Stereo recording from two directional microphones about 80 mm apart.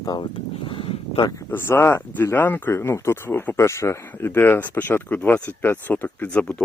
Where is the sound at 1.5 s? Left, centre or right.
Left.